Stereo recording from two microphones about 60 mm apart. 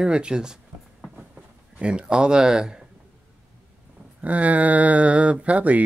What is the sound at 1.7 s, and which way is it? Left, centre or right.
Speech, centre.